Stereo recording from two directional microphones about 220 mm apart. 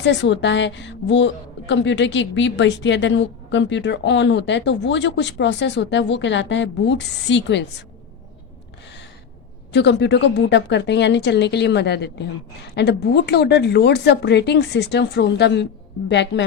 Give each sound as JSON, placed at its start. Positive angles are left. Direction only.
{"t": 0.0, "sound": "a woman's voice", "side_deg": 55}
{"t": 9.7, "sound": "a woman's voice", "side_deg": 50}